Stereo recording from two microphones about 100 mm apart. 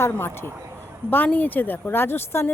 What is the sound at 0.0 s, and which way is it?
Speech, 20° left (ahead or behind).